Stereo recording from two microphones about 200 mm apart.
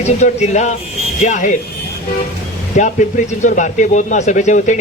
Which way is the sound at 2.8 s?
40° left (ahead or behind).